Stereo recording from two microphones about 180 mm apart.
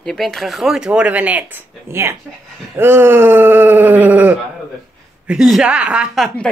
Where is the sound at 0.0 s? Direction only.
Centre (ahead or behind).